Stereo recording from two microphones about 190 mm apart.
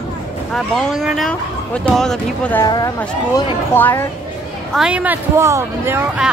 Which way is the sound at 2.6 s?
20° left (ahead or behind).